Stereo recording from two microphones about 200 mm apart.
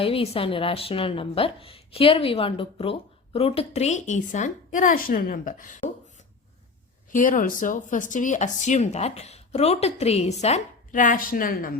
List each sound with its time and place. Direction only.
0.0 s a woman's voice: 30° left (ahead or behind)
7.1 s speech: 40° left (ahead or behind)